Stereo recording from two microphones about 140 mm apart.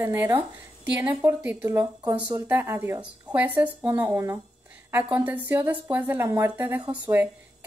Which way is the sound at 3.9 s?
25° right (ahead or behind).